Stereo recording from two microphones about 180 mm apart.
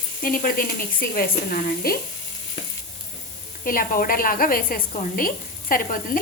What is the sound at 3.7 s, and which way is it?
Speech, 50° left (ahead or behind).